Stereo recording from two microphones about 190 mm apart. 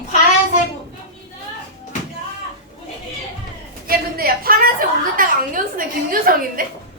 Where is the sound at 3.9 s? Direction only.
50° right (ahead or behind).